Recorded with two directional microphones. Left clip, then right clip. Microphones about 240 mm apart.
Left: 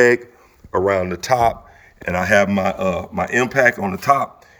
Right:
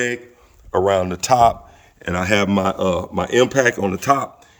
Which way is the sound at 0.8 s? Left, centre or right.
Right.